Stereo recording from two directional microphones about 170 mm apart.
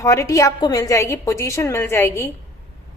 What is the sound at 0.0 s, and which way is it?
A woman's voice, 20° left (ahead or behind).